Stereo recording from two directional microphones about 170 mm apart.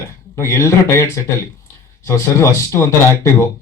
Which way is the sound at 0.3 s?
15° left (ahead or behind).